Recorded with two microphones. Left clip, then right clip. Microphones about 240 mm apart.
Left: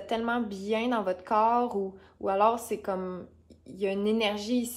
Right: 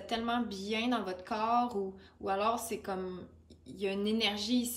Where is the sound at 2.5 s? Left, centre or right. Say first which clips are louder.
Left 5 dB; centre.